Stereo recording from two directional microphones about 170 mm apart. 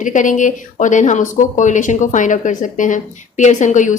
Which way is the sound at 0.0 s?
50° left (ahead or behind).